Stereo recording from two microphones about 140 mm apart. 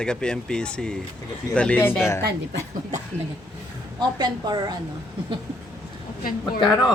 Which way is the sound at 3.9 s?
30° right (ahead or behind).